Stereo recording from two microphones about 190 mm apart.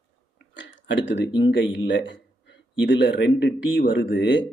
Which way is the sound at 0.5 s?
75° left (ahead or behind).